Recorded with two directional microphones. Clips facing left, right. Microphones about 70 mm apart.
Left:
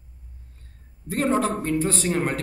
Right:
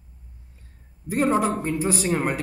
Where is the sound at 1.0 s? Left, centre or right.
Centre.